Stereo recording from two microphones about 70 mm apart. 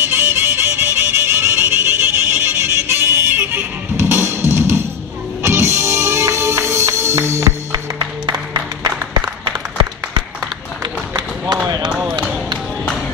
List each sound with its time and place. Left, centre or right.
0.0 s music: right
7.7 s music: right
10.8 s run: right